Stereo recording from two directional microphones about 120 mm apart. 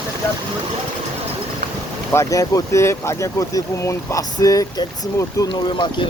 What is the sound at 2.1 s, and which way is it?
Speech, 30° left (ahead or behind).